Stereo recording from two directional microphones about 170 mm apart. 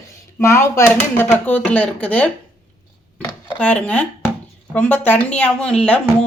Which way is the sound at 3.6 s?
10° left (ahead or behind).